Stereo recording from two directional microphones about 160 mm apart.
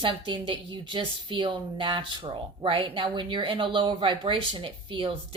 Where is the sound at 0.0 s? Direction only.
30° right (ahead or behind).